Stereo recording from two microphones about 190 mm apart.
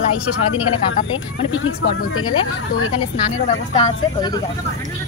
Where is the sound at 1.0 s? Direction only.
90° left.